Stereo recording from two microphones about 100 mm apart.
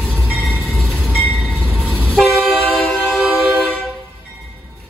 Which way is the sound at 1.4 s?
10° left (ahead or behind).